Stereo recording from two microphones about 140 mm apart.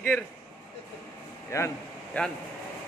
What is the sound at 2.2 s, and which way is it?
Speech, 10° left (ahead or behind).